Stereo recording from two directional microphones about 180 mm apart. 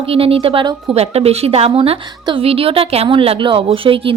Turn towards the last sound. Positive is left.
turn(degrees=-30)  # may be behind; listen again after turning